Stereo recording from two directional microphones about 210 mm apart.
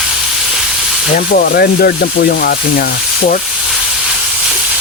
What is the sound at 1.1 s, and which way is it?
Speech, 40° left (ahead or behind).